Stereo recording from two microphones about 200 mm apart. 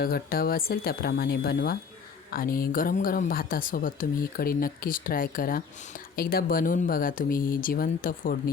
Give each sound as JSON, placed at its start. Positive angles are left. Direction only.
{"t": 0.0, "sound": "a woman's voice", "side_deg": 50}